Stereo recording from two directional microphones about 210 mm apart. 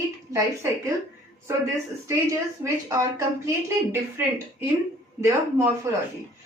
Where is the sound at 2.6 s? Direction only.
15° right (ahead or behind).